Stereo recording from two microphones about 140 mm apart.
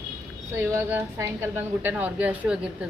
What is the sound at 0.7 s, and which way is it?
A woman's voice, 15° right (ahead or behind).